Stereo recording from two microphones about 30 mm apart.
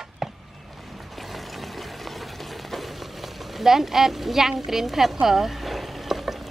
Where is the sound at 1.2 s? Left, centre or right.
Centre.